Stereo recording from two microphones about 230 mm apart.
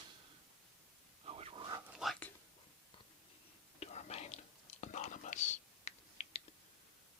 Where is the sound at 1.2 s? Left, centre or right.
Right.